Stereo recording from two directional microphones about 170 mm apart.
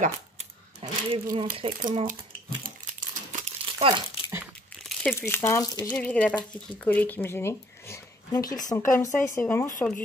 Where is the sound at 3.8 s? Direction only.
30° right (ahead or behind).